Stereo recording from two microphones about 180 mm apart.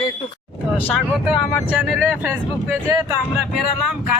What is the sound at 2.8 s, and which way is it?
Speech, 15° right (ahead or behind).